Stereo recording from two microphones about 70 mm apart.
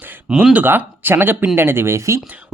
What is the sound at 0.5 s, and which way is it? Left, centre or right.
Speech, right.